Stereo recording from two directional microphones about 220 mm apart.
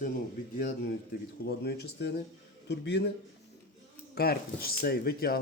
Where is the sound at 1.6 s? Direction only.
45° left (ahead or behind).